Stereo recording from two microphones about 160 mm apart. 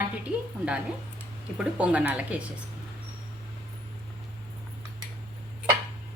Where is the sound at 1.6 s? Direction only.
5° right (ahead or behind).